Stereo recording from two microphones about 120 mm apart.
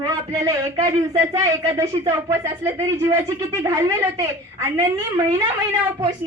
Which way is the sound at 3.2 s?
35° right (ahead or behind).